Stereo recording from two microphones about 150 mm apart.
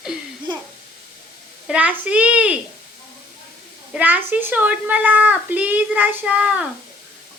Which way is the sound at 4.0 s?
10° right (ahead or behind).